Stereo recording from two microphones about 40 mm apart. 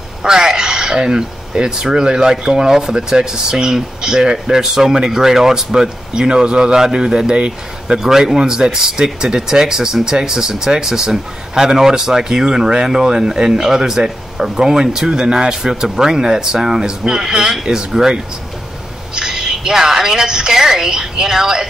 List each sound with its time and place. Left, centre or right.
0.2 s speech: centre
8.0 s speech: centre